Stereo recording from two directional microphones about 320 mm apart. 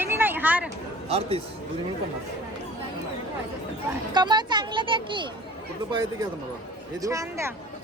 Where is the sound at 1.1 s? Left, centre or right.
Centre.